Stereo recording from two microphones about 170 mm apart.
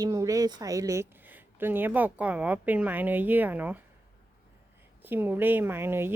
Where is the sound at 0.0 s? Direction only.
20° right (ahead or behind).